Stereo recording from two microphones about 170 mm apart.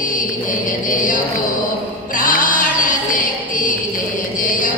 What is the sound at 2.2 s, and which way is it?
Music, 50° left (ahead or behind).